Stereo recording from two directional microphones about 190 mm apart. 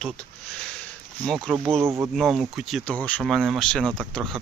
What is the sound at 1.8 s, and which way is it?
Speech, 15° right (ahead or behind).